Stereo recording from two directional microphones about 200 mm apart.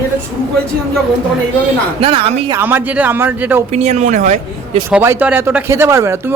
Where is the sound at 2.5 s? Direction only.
10° right (ahead or behind).